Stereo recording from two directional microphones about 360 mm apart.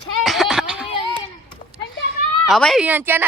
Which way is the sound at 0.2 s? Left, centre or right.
Centre.